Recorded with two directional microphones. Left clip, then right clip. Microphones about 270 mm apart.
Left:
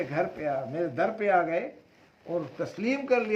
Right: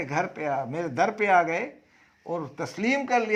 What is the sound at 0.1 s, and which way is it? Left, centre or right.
A man's voice, right.